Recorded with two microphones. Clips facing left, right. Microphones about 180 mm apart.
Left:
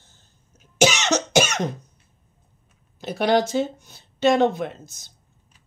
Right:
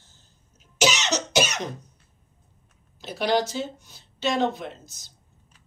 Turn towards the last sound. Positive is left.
turn(degrees=55)  # may be behind; listen again after turning